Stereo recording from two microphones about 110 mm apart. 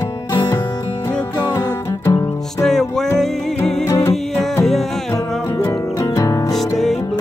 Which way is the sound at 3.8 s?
25° left (ahead or behind).